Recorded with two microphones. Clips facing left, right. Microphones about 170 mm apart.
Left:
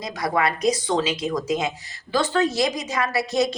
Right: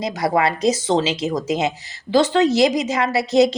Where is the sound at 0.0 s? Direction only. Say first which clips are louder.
Right 4 dB; 25° right (ahead or behind).